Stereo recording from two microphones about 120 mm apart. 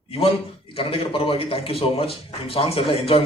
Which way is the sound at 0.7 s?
50° left (ahead or behind).